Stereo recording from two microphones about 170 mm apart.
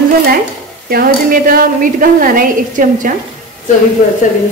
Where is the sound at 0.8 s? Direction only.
60° right (ahead or behind).